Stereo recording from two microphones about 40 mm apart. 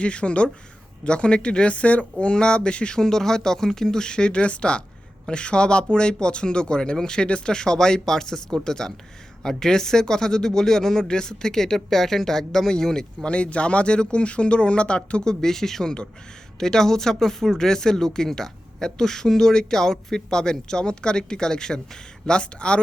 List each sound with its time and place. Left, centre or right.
0.0 s speech: left
3.0 s speech: centre
13.3 s speech: left